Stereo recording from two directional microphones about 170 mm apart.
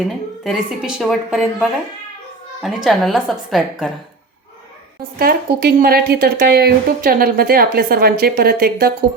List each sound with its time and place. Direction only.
0.4 s a woman's voice: 5° right (ahead or behind)
5.2 s speech: 60° right (ahead or behind)